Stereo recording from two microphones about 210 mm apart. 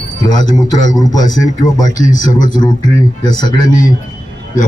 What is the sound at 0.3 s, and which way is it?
Speech, 20° left (ahead or behind).